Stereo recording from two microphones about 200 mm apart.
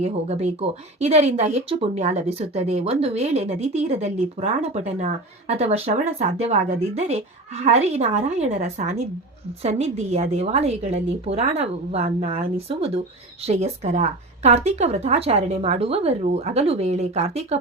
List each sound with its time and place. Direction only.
0.0 s speech: 35° right (ahead or behind)